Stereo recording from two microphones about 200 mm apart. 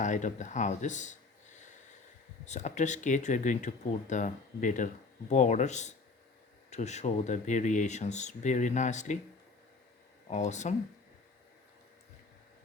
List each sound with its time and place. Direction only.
0.0 s speech: 40° left (ahead or behind)
2.4 s speech: 35° left (ahead or behind)
10.2 s speech: 35° left (ahead or behind)